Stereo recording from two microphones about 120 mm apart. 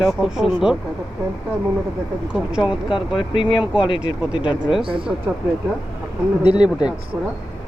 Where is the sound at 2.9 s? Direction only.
45° left (ahead or behind).